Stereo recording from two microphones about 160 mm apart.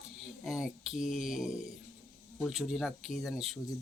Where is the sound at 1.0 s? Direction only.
50° left (ahead or behind).